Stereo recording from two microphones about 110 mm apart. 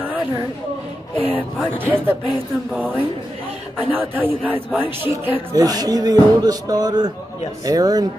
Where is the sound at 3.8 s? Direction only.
15° right (ahead or behind).